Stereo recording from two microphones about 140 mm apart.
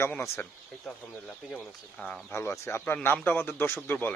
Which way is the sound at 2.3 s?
20° left (ahead or behind).